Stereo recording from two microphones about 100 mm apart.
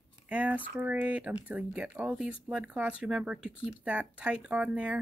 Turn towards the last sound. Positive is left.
turn(degrees=-15)  # may be behind; listen again after turning